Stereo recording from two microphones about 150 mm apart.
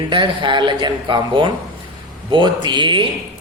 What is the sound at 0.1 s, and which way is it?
Speech, 35° right (ahead or behind).